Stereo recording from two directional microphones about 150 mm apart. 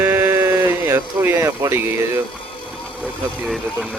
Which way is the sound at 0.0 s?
15° right (ahead or behind).